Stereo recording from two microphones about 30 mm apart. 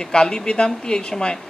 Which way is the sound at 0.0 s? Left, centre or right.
Left.